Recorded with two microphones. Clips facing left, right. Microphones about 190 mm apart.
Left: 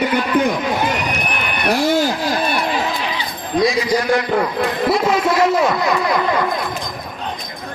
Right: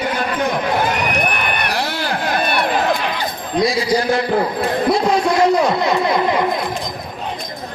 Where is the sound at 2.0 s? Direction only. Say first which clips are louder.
Even; 60° right (ahead or behind).